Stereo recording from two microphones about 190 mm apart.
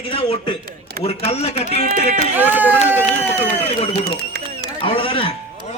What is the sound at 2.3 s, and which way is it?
Speech, 10° right (ahead or behind).